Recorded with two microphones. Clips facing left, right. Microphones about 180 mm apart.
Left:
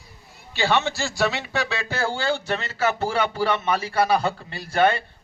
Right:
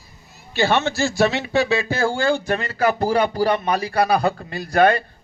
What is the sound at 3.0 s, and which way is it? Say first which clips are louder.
A man's voice: right 5 dB; 40° right (ahead or behind).